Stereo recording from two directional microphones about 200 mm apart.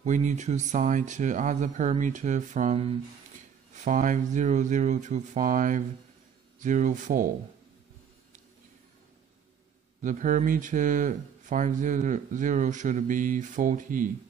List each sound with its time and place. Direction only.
0.0 s speech: 40° right (ahead or behind)
10.0 s speech: 40° right (ahead or behind)